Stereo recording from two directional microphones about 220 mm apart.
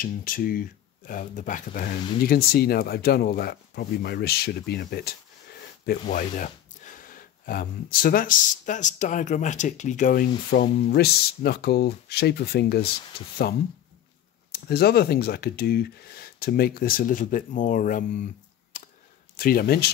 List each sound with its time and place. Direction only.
0.0 s speech: 40° left (ahead or behind)
14.7 s speech: 45° left (ahead or behind)
18.7 s a sound: 35° left (ahead or behind)
19.3 s speech: 40° left (ahead or behind)